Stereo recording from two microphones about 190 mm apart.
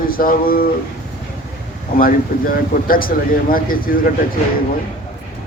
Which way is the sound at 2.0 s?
50° left (ahead or behind).